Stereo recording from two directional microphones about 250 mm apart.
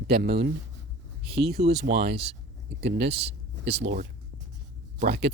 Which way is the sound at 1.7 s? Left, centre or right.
Right.